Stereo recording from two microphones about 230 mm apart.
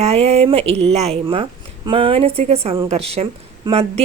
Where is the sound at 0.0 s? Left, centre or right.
Right.